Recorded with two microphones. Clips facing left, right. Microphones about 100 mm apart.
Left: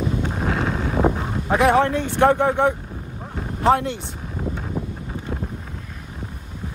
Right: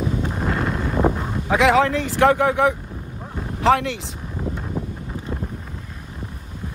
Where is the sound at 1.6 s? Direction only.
90° right.